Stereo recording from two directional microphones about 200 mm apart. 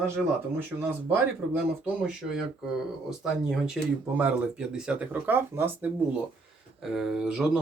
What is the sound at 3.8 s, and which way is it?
Speech, centre (ahead or behind).